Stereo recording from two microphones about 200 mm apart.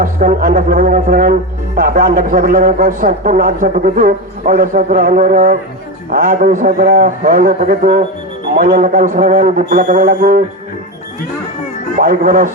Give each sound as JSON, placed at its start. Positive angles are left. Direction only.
{"t": 0.0, "sound": "a man's voice", "side_deg": -45}
{"t": 11.9, "sound": "a man's voice", "side_deg": -45}